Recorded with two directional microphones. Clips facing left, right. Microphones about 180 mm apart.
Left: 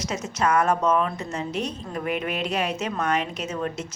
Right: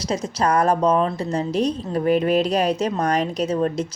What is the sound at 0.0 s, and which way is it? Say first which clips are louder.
A woman's voice: right 3 dB; 35° right (ahead or behind).